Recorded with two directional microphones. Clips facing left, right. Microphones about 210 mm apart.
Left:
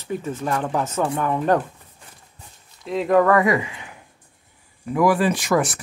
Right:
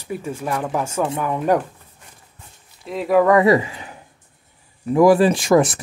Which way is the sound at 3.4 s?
35° right (ahead or behind).